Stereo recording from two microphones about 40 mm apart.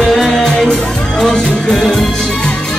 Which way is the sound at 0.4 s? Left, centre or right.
Centre.